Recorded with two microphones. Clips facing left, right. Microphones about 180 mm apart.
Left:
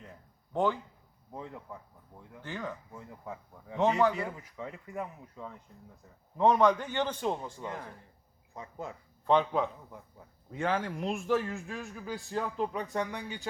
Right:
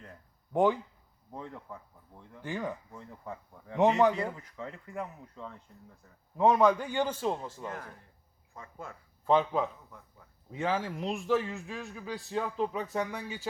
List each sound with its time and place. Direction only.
0.5 s speech: 15° right (ahead or behind)
1.3 s speech: 5° left (ahead or behind)
2.4 s speech: 15° right (ahead or behind)
2.9 s a man's voice: 5° left (ahead or behind)
3.8 s speech: 15° right (ahead or behind)
4.4 s speech: 10° left (ahead or behind)
6.3 s a man's voice: 5° right (ahead or behind)
7.7 s speech: 10° left (ahead or behind)
9.2 s a man's voice: 5° right (ahead or behind)